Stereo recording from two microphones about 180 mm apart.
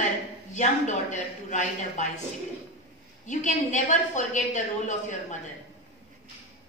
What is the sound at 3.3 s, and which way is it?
A woman's voice, 40° left (ahead or behind).